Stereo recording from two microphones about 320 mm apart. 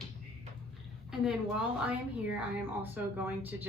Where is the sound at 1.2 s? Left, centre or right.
Centre.